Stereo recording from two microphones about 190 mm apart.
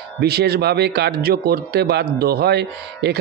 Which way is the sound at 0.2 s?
60° right (ahead or behind).